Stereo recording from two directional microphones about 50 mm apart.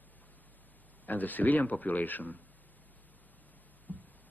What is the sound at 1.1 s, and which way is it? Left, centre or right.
A man's voice, left.